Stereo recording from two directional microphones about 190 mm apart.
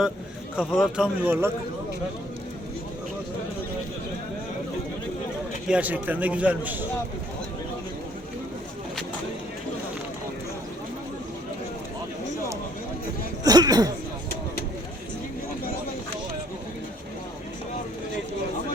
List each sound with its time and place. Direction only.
0.6 s speech: centre (ahead or behind)
5.6 s a man's voice: 5° right (ahead or behind)
13.4 s throat clearing: 20° right (ahead or behind)